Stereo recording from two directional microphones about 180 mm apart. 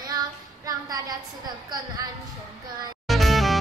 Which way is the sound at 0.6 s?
20° right (ahead or behind).